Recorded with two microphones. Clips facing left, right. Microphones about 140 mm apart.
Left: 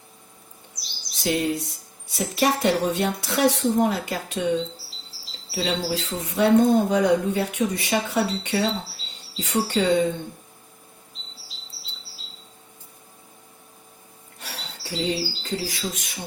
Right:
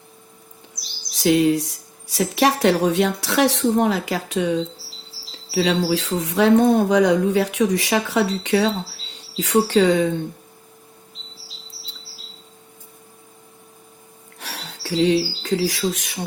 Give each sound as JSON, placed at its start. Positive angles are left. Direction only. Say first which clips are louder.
{"t": 1.2, "sound": "speech", "louder": "right 7 dB", "side_deg": -90}
{"t": 14.3, "sound": "speech", "louder": "right 3 dB", "side_deg": -85}